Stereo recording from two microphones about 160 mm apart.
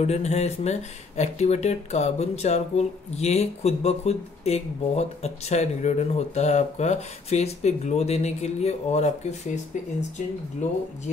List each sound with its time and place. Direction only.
0.0 s speech: 40° left (ahead or behind)
10.6 s speech: 50° left (ahead or behind)